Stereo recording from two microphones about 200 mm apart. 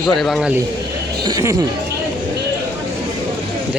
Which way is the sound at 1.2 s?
15° right (ahead or behind).